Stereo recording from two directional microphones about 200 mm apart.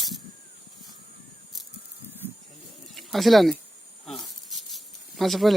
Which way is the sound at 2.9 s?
Centre (ahead or behind).